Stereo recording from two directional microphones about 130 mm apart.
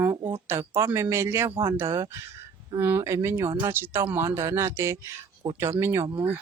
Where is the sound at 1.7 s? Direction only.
20° right (ahead or behind).